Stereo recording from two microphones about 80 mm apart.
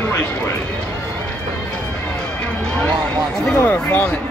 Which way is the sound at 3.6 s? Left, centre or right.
Left.